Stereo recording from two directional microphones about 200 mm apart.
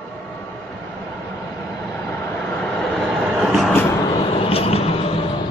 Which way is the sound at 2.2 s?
10° left (ahead or behind).